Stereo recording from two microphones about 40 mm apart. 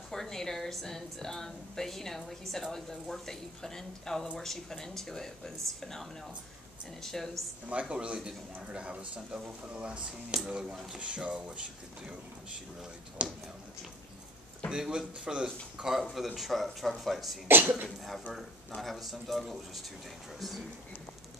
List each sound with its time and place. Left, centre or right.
0.1 s a woman's voice: centre
7.8 s speech: right
11.0 s speech: right
13.2 s speech: right
14.7 s speech: centre
15.8 s speech: centre
17.5 s speech: right
18.8 s speech: centre